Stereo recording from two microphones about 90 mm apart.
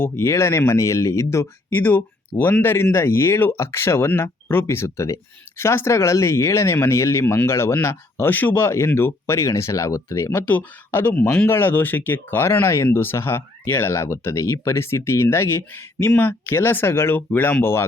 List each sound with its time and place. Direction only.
0.0 s speech: 30° left (ahead or behind)
10.4 s speech: 20° left (ahead or behind)